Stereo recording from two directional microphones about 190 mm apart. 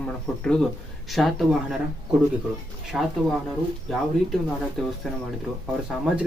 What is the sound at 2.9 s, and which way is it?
Speech, centre (ahead or behind).